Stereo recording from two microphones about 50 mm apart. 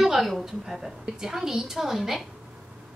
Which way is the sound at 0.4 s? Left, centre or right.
Centre.